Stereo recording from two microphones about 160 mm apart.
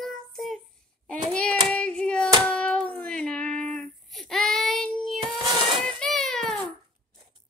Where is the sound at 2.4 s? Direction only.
5° left (ahead or behind).